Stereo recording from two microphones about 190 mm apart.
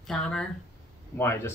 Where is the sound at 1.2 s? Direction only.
15° left (ahead or behind).